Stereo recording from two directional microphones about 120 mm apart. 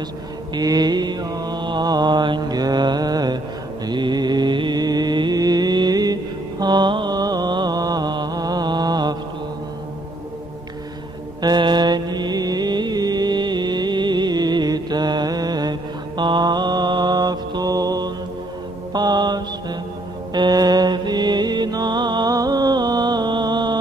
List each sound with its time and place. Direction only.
0.6 s mantra: 35° right (ahead or behind)
11.4 s mantra: 40° right (ahead or behind)